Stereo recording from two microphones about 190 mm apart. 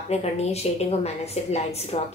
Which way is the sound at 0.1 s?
35° left (ahead or behind).